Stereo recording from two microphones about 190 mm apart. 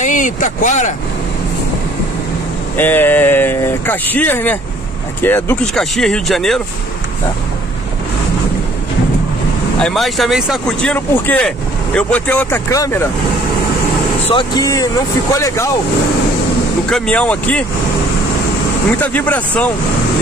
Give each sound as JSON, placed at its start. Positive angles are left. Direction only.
{"t": 0.0, "sound": "speech", "side_deg": 45}
{"t": 2.8, "sound": "speech", "side_deg": 10}
{"t": 9.8, "sound": "speech", "side_deg": 5}
{"t": 14.3, "sound": "speech", "side_deg": 20}
{"t": 16.9, "sound": "speech", "side_deg": 5}
{"t": 18.9, "sound": "speech", "side_deg": 10}